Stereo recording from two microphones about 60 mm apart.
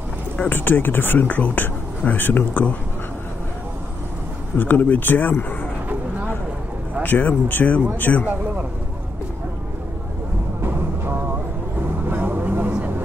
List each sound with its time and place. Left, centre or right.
0.4 s speech: left
4.6 s speech: left
7.0 s speech: left
10.6 s vehicle: right